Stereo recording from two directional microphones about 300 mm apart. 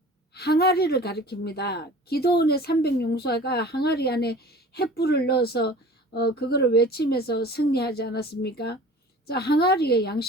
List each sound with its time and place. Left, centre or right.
0.3 s a woman's voice: left